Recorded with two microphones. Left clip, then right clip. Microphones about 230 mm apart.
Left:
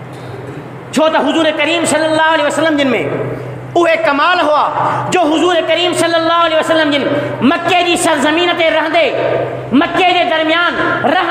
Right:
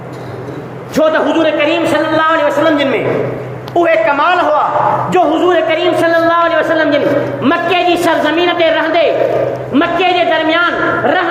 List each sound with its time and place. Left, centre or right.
0.9 s a man's voice: left